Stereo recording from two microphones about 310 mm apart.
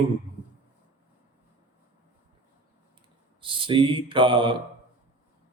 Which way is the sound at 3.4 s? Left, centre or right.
Centre.